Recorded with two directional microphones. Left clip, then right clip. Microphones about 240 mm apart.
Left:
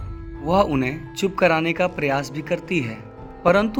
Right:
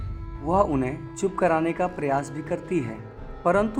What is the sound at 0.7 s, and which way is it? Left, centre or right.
Speech, left.